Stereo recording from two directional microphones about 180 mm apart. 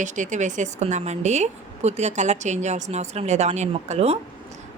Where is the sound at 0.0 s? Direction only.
45° right (ahead or behind).